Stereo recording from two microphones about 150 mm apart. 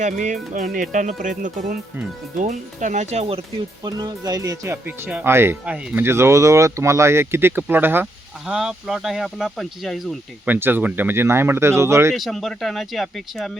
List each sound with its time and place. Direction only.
0.0 s speech: 55° right (ahead or behind)
3.8 s speech: 25° right (ahead or behind)
8.4 s speech: 5° right (ahead or behind)
10.4 s speech: 10° right (ahead or behind)
12.1 s speech: centre (ahead or behind)